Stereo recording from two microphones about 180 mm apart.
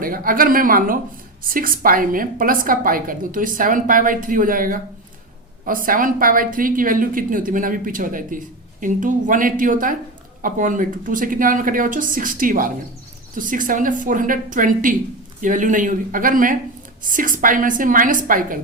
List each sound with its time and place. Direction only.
0.0 s a woman's voice: 50° right (ahead or behind)